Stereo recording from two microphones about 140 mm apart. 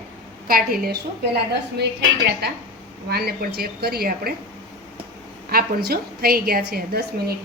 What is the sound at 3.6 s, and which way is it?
Speech, 90° right.